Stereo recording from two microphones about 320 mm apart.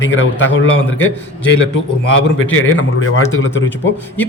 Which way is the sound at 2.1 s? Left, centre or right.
Left.